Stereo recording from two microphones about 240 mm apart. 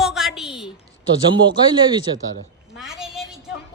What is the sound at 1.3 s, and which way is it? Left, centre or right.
Speech, centre.